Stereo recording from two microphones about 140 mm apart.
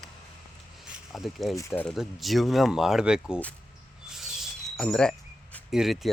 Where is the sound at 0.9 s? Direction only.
Centre (ahead or behind).